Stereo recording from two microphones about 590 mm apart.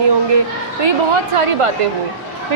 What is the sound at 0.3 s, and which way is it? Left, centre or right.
A woman's voice, right.